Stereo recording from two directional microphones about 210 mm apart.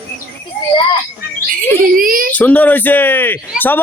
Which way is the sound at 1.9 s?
40° right (ahead or behind).